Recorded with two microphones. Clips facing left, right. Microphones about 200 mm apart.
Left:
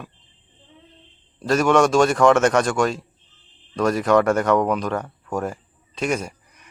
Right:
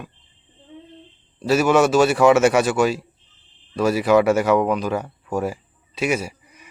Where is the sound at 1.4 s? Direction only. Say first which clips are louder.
Right 1 dB; 5° right (ahead or behind).